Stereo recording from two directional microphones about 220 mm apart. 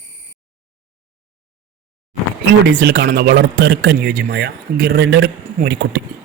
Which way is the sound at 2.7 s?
50° right (ahead or behind).